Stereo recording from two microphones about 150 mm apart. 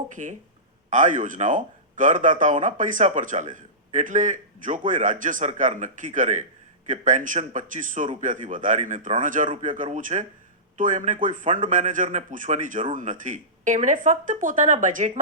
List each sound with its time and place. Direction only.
0.2 s speech: 55° right (ahead or behind)